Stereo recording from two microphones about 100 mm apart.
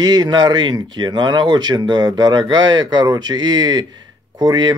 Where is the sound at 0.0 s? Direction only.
45° right (ahead or behind).